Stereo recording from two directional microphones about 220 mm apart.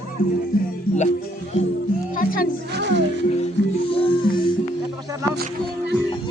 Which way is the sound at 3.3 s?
30° left (ahead or behind).